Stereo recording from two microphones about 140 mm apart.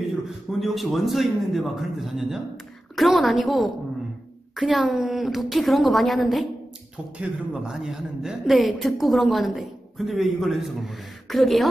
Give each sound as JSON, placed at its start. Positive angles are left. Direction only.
{"t": 0.5, "sound": "a woman's voice", "side_deg": 0}